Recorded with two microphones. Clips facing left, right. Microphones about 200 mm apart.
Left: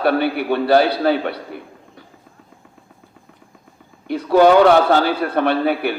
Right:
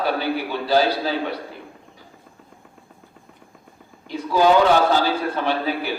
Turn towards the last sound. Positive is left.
turn(degrees=60)  # may be behind; listen again after turning